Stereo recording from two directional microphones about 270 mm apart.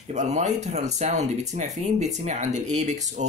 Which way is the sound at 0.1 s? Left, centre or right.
Right.